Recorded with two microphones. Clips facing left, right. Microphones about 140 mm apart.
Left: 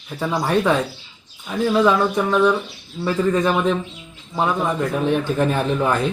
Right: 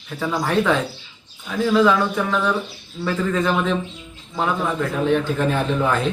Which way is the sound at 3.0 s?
15° left (ahead or behind).